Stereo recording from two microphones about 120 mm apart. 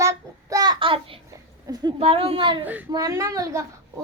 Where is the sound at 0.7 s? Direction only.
45° right (ahead or behind).